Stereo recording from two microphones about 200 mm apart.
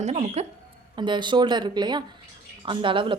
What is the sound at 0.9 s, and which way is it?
A woman's voice, 25° right (ahead or behind).